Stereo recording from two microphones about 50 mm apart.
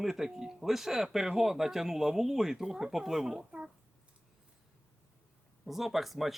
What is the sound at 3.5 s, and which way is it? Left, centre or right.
Speech, centre.